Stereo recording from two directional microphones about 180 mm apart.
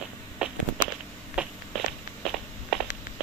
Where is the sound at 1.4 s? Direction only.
5° right (ahead or behind).